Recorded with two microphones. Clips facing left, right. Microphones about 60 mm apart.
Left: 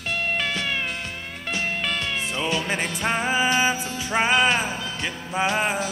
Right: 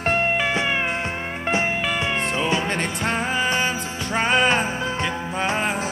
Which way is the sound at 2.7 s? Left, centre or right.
Centre.